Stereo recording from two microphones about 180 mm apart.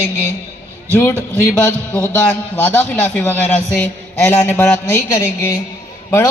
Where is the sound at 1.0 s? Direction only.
15° left (ahead or behind).